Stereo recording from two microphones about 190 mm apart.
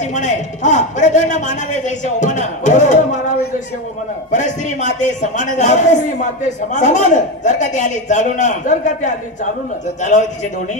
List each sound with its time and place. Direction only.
0.0 s a man's voice: 40° left (ahead or behind)